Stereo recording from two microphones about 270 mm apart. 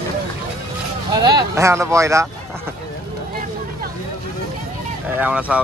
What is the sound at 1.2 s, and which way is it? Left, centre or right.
A man's voice, centre.